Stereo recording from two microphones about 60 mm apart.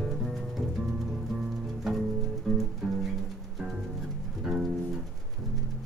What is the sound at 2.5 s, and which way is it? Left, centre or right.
Music, centre.